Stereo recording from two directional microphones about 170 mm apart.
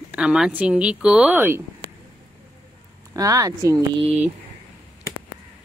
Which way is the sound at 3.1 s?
20° right (ahead or behind).